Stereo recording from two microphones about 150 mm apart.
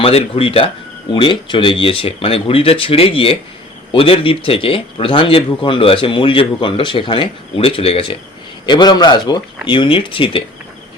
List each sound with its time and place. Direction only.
0.0 s speech: 40° left (ahead or behind)
8.6 s speech: 30° left (ahead or behind)